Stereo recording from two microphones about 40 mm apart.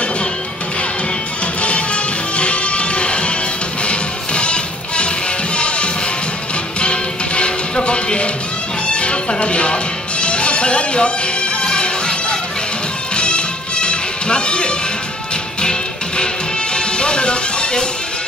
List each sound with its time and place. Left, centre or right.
2.3 s music: left
16.7 s music: left